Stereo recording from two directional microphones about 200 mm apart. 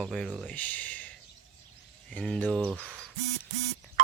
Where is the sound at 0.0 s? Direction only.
Centre (ahead or behind).